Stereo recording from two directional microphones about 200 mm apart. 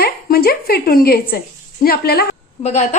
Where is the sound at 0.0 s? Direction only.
50° left (ahead or behind).